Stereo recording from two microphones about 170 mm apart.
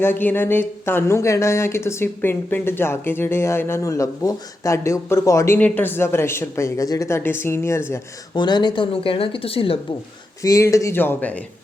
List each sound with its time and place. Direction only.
0.0 s speech: 10° left (ahead or behind); by 9.7 s 35° left (ahead or behind)
10.4 s speech: 20° left (ahead or behind)